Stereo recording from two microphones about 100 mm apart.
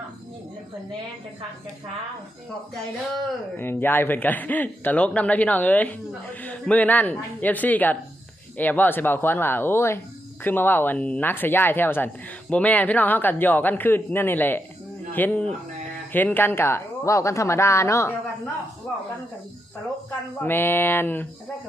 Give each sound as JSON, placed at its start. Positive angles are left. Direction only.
{"t": 3.6, "sound": "speech", "side_deg": 20}
{"t": 18.9, "sound": "speech", "side_deg": 15}
{"t": 20.4, "sound": "speech", "side_deg": 20}